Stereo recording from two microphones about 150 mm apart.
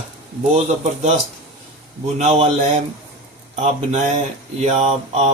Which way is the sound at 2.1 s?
50° right (ahead or behind).